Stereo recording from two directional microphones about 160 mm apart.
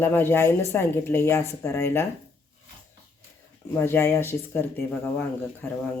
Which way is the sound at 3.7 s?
15° left (ahead or behind).